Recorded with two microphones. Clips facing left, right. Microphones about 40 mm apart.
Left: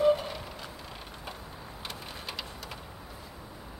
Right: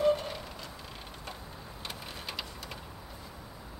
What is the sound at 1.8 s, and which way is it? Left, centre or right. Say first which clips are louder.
Rain: even; centre.